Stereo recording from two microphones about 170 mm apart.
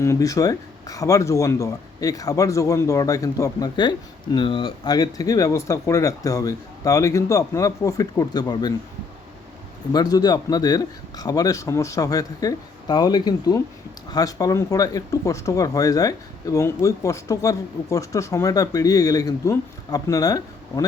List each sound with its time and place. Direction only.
0.0 s speech: 20° left (ahead or behind)
9.9 s speech: 25° left (ahead or behind)